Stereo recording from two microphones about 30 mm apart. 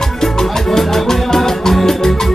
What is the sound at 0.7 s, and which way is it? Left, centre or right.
Music, centre.